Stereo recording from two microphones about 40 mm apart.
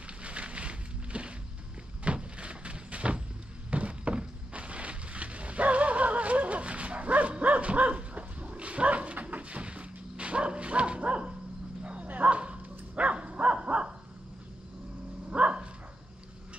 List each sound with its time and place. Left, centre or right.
0.2 s a sound: right
11.8 s bow-wow: right
15.2 s dog: right